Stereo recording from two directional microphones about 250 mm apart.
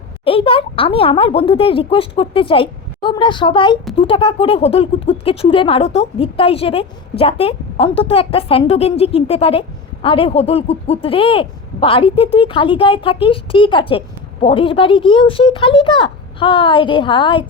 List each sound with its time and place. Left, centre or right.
0.3 s speech: left